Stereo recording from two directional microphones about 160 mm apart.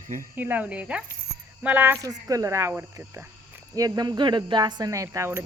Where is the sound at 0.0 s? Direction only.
60° right (ahead or behind).